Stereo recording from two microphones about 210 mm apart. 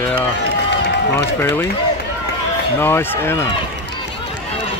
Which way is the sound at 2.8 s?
10° left (ahead or behind).